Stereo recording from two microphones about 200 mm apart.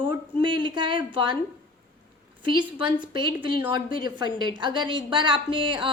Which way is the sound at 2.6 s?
25° right (ahead or behind).